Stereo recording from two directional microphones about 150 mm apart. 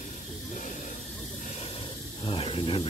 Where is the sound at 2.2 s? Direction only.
35° left (ahead or behind).